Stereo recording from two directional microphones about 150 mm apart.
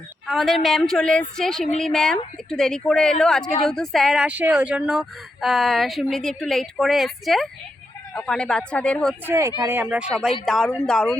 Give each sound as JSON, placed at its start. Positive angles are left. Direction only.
{"t": 0.3, "sound": "speech", "side_deg": 0}
{"t": 9.2, "sound": "speech", "side_deg": -20}
{"t": 10.4, "sound": "speech", "side_deg": 0}